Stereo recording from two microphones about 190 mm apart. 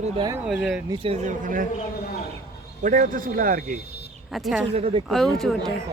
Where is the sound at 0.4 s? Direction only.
5° right (ahead or behind).